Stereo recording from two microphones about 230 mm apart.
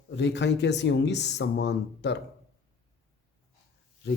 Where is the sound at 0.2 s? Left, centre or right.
Left.